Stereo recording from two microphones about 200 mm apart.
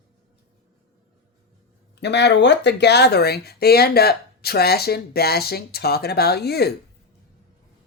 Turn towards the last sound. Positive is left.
turn(degrees=55)  # may be behind; listen again after turning